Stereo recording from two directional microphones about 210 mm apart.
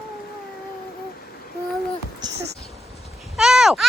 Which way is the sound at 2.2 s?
20° right (ahead or behind).